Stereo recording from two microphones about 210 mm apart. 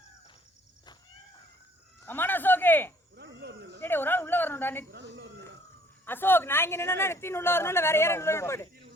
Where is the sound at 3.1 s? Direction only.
55° right (ahead or behind).